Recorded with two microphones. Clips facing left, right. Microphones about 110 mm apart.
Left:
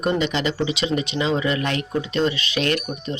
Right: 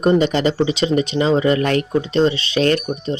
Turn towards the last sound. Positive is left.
turn(degrees=-35)  # may be behind; listen again after turning